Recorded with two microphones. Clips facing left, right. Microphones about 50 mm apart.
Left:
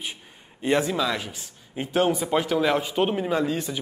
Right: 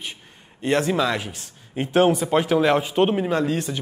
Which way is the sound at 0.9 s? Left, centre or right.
Centre.